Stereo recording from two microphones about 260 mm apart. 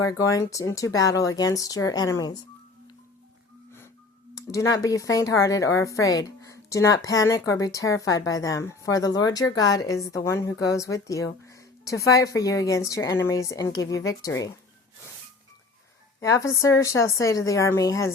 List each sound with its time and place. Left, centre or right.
0.0 s speech: centre
4.4 s speech: centre
16.2 s speech: centre